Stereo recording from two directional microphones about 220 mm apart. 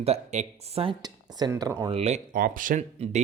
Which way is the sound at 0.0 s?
30° right (ahead or behind).